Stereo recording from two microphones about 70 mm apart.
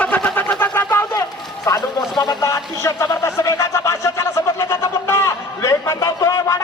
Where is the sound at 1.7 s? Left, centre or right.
Left.